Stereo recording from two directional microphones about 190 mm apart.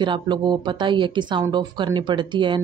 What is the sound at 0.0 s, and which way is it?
Speech, 25° right (ahead or behind).